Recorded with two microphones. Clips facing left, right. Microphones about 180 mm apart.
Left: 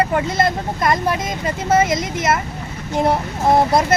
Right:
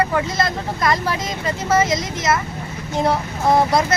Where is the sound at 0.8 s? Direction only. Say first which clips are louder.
Left 2 dB; 20° left (ahead or behind).